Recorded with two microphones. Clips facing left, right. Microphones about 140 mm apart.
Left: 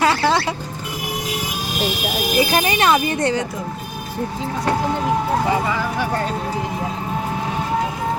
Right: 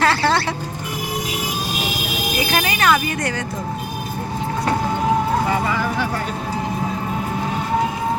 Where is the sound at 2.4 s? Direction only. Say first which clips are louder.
Left 4 dB; 25° left (ahead or behind).